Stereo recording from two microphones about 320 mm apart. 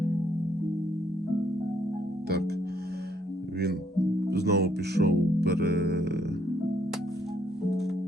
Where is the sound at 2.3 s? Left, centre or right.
Right.